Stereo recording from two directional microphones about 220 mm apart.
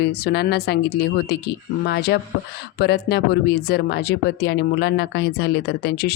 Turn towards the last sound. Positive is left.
turn(degrees=45)  # may be behind; listen again after turning